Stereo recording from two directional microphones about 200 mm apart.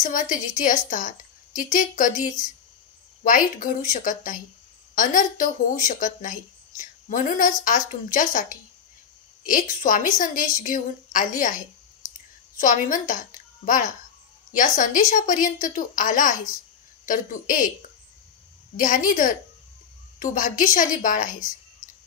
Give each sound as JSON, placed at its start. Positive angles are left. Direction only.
{"t": 0.0, "sound": "a woman's voice", "side_deg": 40}
{"t": 18.8, "sound": "a woman's voice", "side_deg": 40}